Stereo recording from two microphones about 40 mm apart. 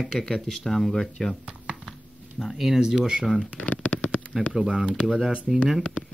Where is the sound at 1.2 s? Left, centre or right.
Centre.